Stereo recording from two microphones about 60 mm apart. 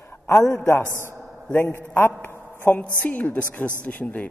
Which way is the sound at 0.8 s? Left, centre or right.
Right.